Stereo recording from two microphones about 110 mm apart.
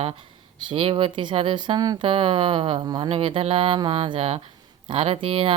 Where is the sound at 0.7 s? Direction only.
55° right (ahead or behind); by 2.0 s 40° right (ahead or behind).